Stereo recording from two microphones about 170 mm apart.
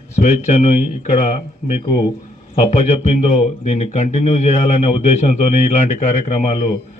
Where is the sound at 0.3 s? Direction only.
40° left (ahead or behind).